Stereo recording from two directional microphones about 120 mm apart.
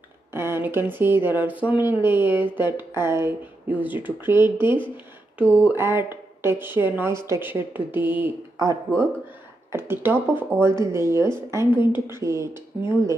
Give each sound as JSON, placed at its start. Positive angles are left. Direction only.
{"t": 0.3, "sound": "speech", "side_deg": -20}
{"t": 8.5, "sound": "speech", "side_deg": -30}